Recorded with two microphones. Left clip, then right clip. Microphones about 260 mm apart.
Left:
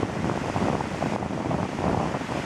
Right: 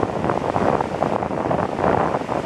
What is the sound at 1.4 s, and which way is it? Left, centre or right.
Vehicle, left.